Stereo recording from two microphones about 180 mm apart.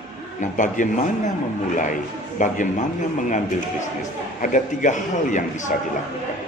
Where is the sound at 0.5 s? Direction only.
45° left (ahead or behind).